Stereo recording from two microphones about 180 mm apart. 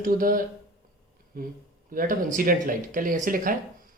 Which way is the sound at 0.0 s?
50° right (ahead or behind).